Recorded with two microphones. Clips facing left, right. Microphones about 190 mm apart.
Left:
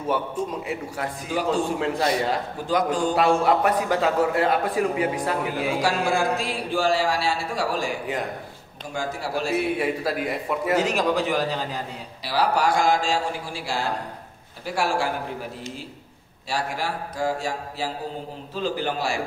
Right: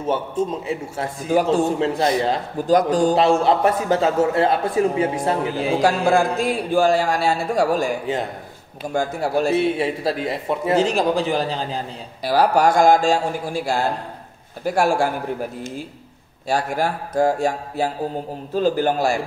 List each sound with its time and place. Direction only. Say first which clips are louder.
0.0 s a man's voice: right 4 dB; 25° right (ahead or behind)
1.3 s speech: right 9 dB; 45° right (ahead or behind)
1.8 s a man's voice: right 4 dB; 25° right (ahead or behind)
2.7 s a man's voice: right 6 dB; 35° right (ahead or behind)
3.2 s a man's voice: right 3 dB; 25° right (ahead or behind)
5.8 s speech: right 7 dB; 50° right (ahead or behind)
8.9 s speech: right 7 dB; 50° right (ahead or behind)
9.5 s a man's voice: right 4 dB; 25° right (ahead or behind)
12.2 s speech: right 6 dB; 50° right (ahead or behind)
16.4 s speech: right 6 dB; 50° right (ahead or behind)